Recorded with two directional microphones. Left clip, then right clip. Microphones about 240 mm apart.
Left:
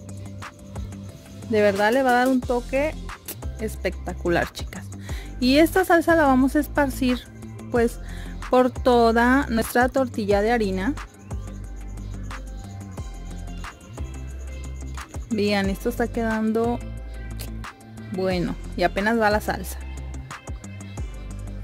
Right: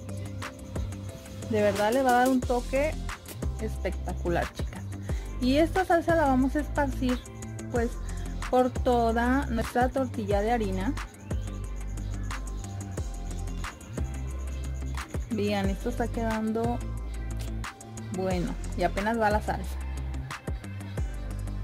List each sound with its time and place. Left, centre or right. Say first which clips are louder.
1.5 s speech: left 6 dB; left
8.5 s speech: left 6 dB; left
15.3 s speech: left 6 dB; left
17.6 s music: left 1 dB; centre
18.2 s speech: left 6 dB; left